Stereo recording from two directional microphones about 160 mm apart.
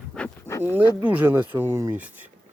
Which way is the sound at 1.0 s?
10° right (ahead or behind).